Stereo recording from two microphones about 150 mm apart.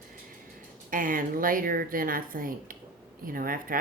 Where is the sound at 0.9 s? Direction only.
65° right (ahead or behind).